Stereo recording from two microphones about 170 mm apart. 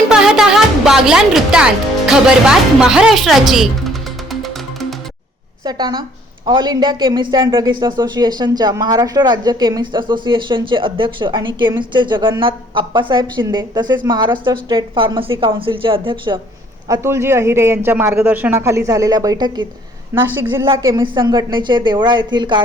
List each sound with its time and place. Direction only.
0.1 s music: 5° right (ahead or behind)
5.6 s a woman's voice: 25° right (ahead or behind)
16.9 s a man's voice: 15° right (ahead or behind)
20.7 s a woman's voice: 25° right (ahead or behind)